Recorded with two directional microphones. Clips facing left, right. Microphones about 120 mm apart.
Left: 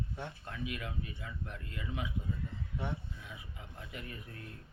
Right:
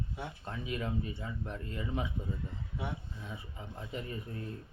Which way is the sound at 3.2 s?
35° right (ahead or behind).